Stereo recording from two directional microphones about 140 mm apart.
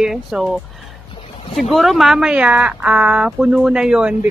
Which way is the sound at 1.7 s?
Centre (ahead or behind).